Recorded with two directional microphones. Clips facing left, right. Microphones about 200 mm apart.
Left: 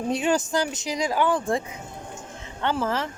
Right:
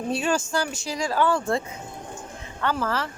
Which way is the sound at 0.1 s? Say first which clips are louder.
Left 2 dB; 20° left (ahead or behind).